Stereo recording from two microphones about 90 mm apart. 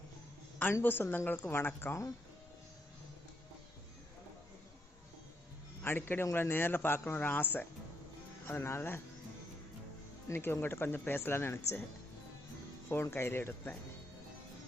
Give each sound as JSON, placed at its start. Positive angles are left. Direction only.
{"t": 0.6, "sound": "a woman's voice", "side_deg": 25}
{"t": 5.8, "sound": "a woman's voice", "side_deg": 25}
{"t": 10.2, "sound": "a woman's voice", "side_deg": 25}
{"t": 12.9, "sound": "a woman's voice", "side_deg": 25}